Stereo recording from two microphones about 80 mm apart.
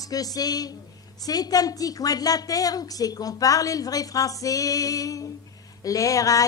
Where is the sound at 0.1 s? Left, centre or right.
Left.